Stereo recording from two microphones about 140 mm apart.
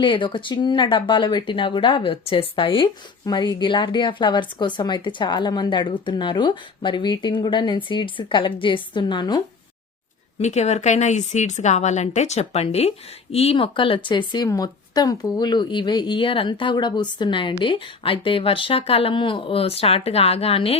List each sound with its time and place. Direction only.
0.0 s speech: 35° left (ahead or behind)
10.4 s a woman's voice: 55° left (ahead or behind)